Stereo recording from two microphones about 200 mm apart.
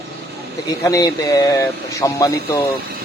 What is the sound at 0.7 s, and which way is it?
Speech, 15° left (ahead or behind).